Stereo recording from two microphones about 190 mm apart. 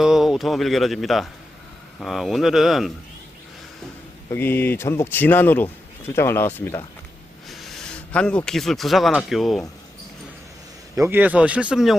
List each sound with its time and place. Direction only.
0.0 s speech: centre (ahead or behind)
4.3 s speech: 10° left (ahead or behind)
7.4 s speech: centre (ahead or behind)
10.9 s speech: 15° right (ahead or behind)